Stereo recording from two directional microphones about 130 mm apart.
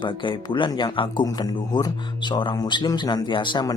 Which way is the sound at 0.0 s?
40° left (ahead or behind).